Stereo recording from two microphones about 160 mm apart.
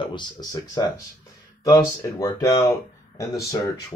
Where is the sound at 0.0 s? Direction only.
30° left (ahead or behind).